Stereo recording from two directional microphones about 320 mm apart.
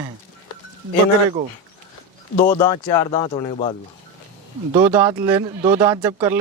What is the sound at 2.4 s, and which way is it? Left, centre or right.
Speech, centre.